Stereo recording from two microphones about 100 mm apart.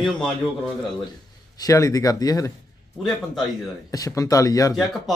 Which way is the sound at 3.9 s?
35° left (ahead or behind).